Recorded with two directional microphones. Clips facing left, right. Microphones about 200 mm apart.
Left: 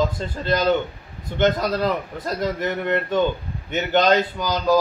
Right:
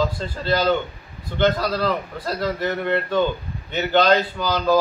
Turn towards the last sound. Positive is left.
turn(degrees=15)  # may be behind; listen again after turning